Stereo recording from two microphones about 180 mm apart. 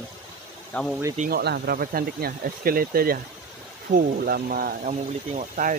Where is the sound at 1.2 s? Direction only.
60° right (ahead or behind).